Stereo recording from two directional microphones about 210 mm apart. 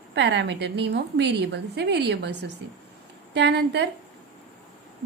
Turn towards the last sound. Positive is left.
turn(degrees=-55)  # may be behind; listen again after turning